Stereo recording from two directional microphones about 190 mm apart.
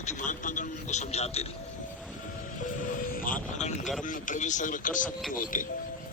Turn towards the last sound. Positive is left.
turn(degrees=45)  # may be behind; listen again after turning